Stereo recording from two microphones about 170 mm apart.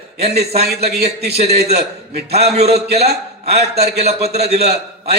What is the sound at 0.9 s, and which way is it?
Speech, 70° right (ahead or behind).